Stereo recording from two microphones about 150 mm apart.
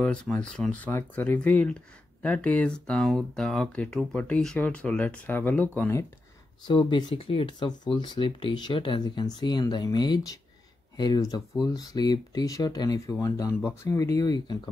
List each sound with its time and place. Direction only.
0.0 s speech: 5° left (ahead or behind)
6.7 s speech: 30° left (ahead or behind)